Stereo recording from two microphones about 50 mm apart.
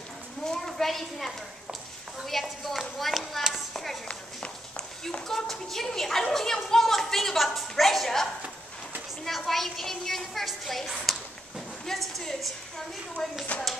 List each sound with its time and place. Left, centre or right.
0.5 s a woman's voice: centre
4.1 s run: centre
5.3 s a woman's voice: centre
9.4 s a woman's voice: centre
11.1 s a sound: centre